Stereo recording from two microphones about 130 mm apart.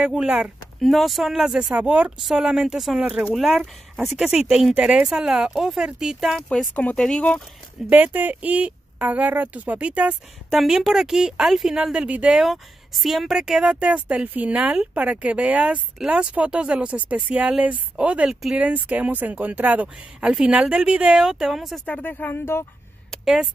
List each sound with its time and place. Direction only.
0.0 s speech: 5° right (ahead or behind)
6.7 s speech: 10° left (ahead or behind)
7.9 s speech: 10° right (ahead or behind)
21.8 s speech: 15° left (ahead or behind)